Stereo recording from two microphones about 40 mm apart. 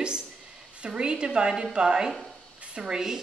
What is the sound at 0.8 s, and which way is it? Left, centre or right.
Speech, right.